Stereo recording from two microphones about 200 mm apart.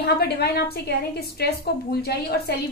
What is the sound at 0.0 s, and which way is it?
A woman's voice, 55° left (ahead or behind).